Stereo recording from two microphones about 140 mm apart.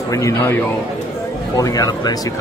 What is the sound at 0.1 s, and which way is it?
Speech, 20° left (ahead or behind).